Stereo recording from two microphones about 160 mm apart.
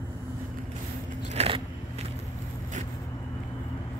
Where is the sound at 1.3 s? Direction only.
40° right (ahead or behind).